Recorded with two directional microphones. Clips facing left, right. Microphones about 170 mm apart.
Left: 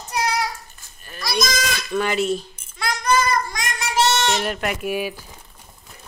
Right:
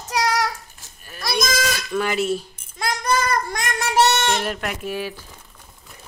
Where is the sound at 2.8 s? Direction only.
45° right (ahead or behind).